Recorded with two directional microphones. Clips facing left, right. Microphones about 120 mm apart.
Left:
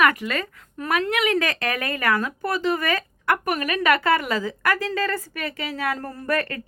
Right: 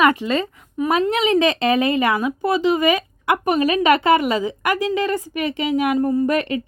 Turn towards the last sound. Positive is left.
turn(degrees=-20)  # may be behind; listen again after turning